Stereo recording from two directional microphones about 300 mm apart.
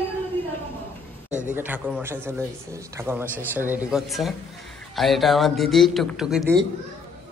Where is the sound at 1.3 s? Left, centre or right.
Right.